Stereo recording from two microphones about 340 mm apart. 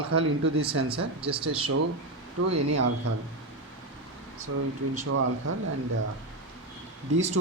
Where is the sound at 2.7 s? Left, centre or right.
Right.